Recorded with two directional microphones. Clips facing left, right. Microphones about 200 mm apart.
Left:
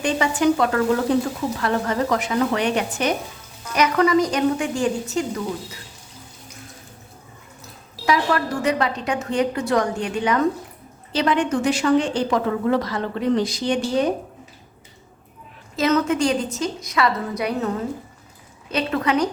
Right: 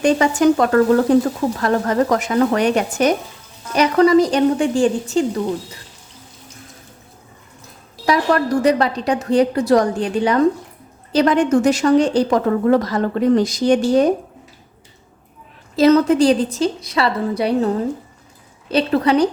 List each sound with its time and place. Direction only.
0.0 s speech: 45° right (ahead or behind)
3.8 s a woman's voice: 35° right (ahead or behind)
8.0 s a woman's voice: 35° right (ahead or behind)
15.7 s a woman's voice: 35° right (ahead or behind)
18.7 s a woman's voice: 35° right (ahead or behind)